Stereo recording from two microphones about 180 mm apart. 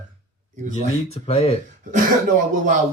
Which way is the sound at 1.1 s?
35° left (ahead or behind).